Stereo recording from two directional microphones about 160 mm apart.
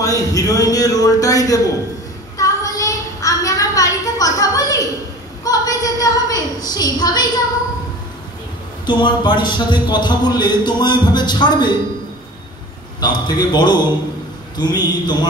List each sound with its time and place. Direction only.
0.0 s a man's voice: 20° left (ahead or behind)
2.3 s a sound: 20° left (ahead or behind)
8.8 s speech: 30° left (ahead or behind)
13.0 s speech: 25° left (ahead or behind)